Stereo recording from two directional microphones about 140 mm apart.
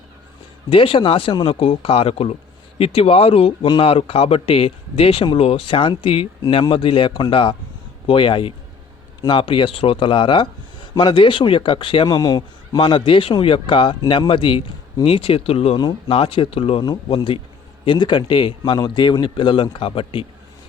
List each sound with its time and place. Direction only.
0.7 s a man's voice: 40° left (ahead or behind)
17.8 s a man's voice: 35° left (ahead or behind)